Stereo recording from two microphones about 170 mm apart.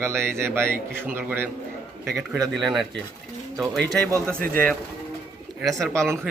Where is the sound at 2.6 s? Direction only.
Centre (ahead or behind).